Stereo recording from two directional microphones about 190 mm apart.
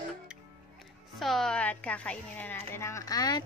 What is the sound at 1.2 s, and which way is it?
A woman's voice, centre (ahead or behind).